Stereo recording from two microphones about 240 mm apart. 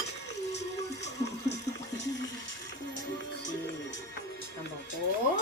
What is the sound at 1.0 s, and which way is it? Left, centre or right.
Music, left.